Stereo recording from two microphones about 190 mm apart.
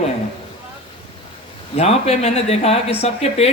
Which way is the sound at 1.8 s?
35° left (ahead or behind).